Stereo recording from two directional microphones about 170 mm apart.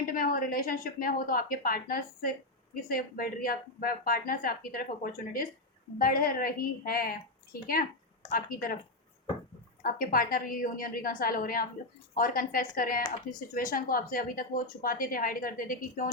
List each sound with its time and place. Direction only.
0.0 s a woman's voice: 55° left (ahead or behind)
8.3 s a woman's voice: 60° left (ahead or behind)
9.8 s a woman's voice: 60° left (ahead or behind)